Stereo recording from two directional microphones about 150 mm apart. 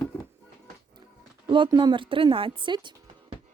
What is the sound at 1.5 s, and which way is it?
A woman's voice, 30° right (ahead or behind).